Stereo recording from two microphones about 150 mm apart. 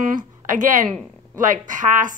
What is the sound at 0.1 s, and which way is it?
Speech, 60° right (ahead or behind).